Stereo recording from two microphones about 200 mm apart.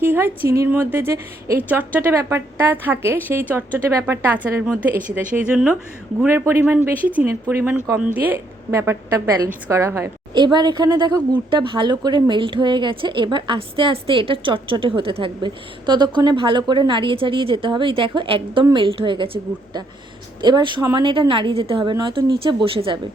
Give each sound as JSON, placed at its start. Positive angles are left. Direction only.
{"t": 0.0, "sound": "a woman's voice", "side_deg": -10}